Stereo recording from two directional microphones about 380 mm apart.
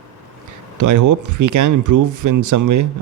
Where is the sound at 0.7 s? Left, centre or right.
Right.